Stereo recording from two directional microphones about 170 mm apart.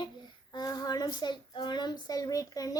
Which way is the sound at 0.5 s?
25° left (ahead or behind).